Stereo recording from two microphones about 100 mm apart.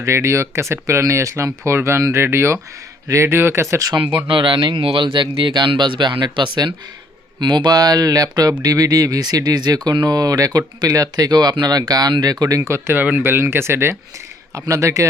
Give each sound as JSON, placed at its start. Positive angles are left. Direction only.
{"t": 0.0, "sound": "speech", "side_deg": -30}
{"t": 4.3, "sound": "speech", "side_deg": -60}